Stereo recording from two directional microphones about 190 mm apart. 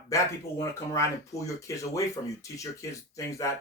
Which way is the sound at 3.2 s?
15° left (ahead or behind).